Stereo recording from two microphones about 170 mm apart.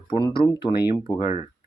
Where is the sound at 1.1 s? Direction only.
40° left (ahead or behind).